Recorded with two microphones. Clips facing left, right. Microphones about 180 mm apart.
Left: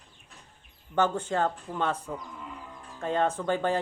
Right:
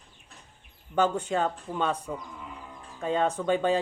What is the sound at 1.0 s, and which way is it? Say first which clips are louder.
Speech: right 1 dB; 15° right (ahead or behind).